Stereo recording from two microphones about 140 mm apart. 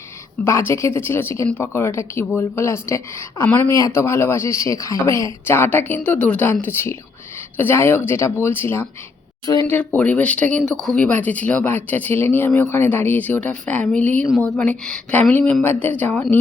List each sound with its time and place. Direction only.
0.4 s speech: 20° left (ahead or behind)
3.7 s speech: 25° left (ahead or behind)